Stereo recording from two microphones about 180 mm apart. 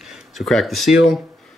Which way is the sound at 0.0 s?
Centre (ahead or behind).